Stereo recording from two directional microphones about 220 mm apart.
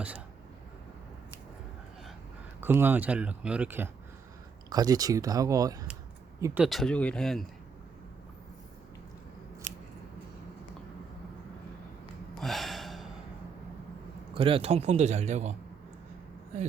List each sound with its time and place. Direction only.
2.6 s speech: 10° right (ahead or behind)
12.4 s gasp: centre (ahead or behind)
14.3 s speech: 25° right (ahead or behind)
16.5 s speech: 30° right (ahead or behind)